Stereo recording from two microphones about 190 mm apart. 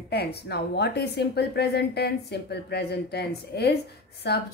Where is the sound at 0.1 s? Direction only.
60° left (ahead or behind).